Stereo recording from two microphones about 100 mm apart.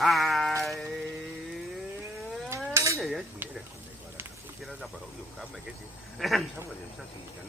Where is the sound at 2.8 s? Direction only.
30° right (ahead or behind).